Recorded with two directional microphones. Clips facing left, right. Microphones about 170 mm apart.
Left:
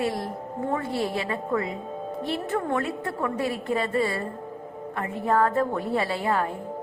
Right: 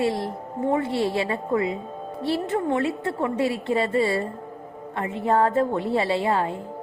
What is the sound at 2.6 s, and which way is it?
A woman's voice, 20° right (ahead or behind).